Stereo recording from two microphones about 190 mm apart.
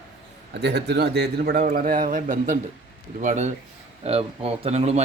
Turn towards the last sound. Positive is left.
turn(degrees=-35)  # may be behind; listen again after turning